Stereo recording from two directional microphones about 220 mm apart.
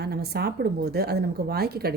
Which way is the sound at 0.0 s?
45° right (ahead or behind).